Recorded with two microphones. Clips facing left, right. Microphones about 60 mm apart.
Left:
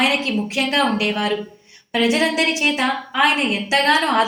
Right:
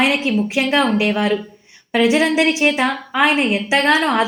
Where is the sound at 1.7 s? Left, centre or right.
Centre.